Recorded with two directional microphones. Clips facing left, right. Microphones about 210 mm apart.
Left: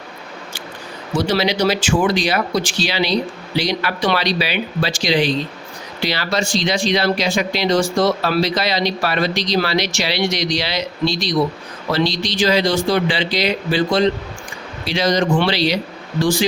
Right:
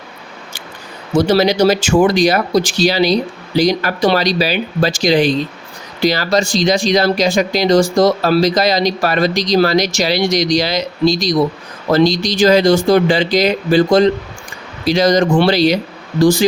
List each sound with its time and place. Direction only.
1.1 s speech: 45° right (ahead or behind)